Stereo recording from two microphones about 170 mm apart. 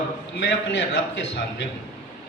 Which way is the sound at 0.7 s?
90° left.